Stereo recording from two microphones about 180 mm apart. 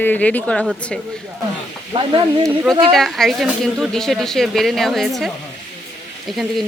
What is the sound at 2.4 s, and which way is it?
Speech, 10° right (ahead or behind).